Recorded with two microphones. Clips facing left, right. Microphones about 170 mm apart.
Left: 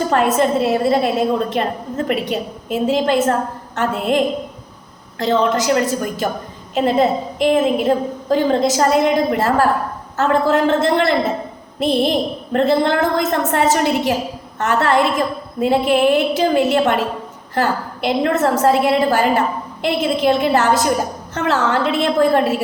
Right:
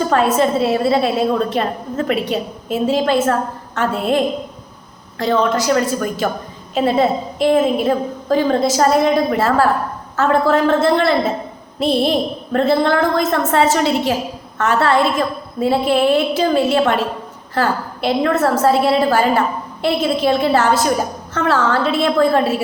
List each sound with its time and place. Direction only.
0.2 s a woman's voice: 15° left (ahead or behind)
5.3 s a woman's voice: 20° left (ahead or behind)